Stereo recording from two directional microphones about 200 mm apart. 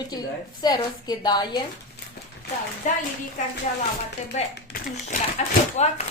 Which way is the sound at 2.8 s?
40° left (ahead or behind).